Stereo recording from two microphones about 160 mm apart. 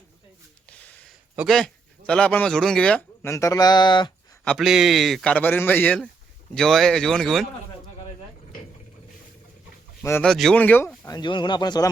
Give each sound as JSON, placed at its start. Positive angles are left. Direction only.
{"t": 0.7, "sound": "a sound", "side_deg": 10}
{"t": 1.4, "sound": "speech", "side_deg": 0}
{"t": 3.2, "sound": "speech", "side_deg": 20}
{"t": 4.4, "sound": "a man's voice", "side_deg": 0}
{"t": 10.0, "sound": "speech", "side_deg": 15}
{"t": 10.2, "sound": "speech", "side_deg": 0}
{"t": 11.1, "sound": "speech", "side_deg": 30}